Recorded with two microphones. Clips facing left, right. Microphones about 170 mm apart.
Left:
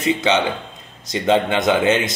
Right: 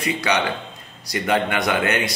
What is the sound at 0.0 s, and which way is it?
A man's voice, 20° left (ahead or behind).